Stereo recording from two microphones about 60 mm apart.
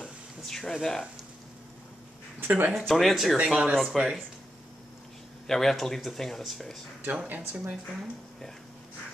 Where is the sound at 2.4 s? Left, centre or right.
Right.